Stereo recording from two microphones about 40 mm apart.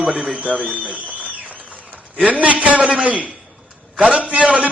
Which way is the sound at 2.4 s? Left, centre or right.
Right.